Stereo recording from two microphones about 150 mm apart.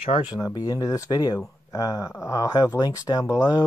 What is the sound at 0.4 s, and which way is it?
Speech, 25° left (ahead or behind).